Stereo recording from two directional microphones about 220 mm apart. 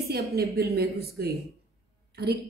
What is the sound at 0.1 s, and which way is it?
A woman's voice, 45° right (ahead or behind).